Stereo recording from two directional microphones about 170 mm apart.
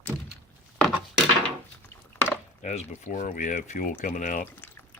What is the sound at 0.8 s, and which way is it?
Wood, centre (ahead or behind).